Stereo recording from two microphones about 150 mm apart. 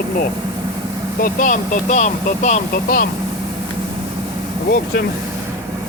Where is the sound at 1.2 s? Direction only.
65° left (ahead or behind).